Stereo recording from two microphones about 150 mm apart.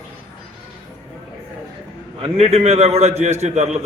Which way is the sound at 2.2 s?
40° right (ahead or behind).